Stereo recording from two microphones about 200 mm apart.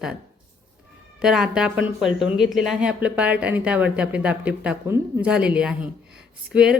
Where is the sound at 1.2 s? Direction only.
5° right (ahead or behind).